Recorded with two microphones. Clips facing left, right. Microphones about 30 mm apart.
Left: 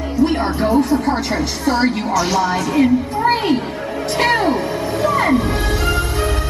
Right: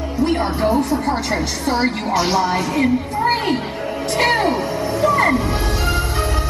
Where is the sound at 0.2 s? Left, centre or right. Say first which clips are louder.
Left 1 dB; centre.